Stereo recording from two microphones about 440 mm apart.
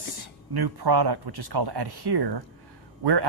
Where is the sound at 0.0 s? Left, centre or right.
Right.